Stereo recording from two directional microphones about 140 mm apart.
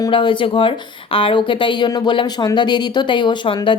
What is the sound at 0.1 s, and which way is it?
A woman's voice, 35° left (ahead or behind).